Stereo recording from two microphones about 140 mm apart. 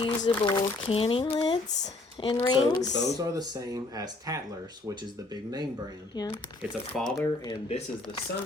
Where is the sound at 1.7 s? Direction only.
55° left (ahead or behind).